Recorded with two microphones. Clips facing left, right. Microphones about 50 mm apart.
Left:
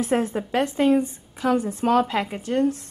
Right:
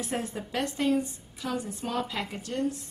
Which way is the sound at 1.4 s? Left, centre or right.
Left.